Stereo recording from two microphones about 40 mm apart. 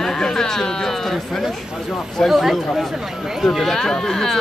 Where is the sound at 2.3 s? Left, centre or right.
Centre.